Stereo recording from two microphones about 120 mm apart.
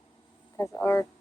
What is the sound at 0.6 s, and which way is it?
Speech, 25° left (ahead or behind).